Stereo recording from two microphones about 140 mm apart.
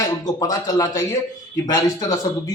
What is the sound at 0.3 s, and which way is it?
A man's voice, 25° left (ahead or behind).